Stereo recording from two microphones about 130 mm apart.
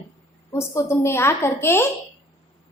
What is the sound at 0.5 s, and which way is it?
A woman's voice, 20° left (ahead or behind).